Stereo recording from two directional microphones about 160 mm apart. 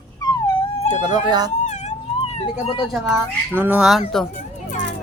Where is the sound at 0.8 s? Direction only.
50° left (ahead or behind).